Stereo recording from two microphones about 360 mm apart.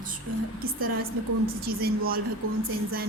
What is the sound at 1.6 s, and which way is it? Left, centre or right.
Speech, right.